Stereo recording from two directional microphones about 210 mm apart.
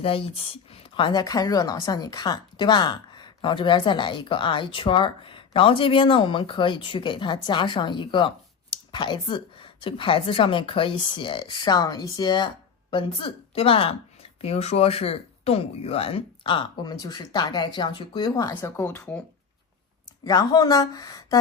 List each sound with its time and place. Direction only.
0.0 s speech: 25° left (ahead or behind); by 19.2 s 5° left (ahead or behind)
20.2 s speech: 20° left (ahead or behind)